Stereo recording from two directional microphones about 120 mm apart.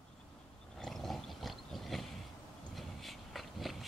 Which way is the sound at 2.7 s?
Centre (ahead or behind).